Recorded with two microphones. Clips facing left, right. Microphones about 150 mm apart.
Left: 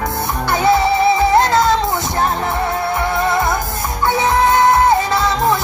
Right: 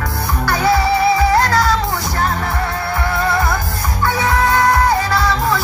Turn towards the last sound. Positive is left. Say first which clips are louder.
# left 1 dB
turn(degrees=20)  # may be behind; listen again after turning